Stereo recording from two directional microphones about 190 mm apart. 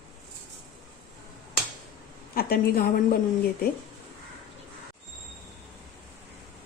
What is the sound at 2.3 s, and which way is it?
Speech, 50° left (ahead or behind).